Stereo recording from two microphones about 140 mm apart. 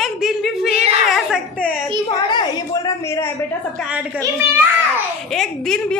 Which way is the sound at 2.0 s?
30° left (ahead or behind).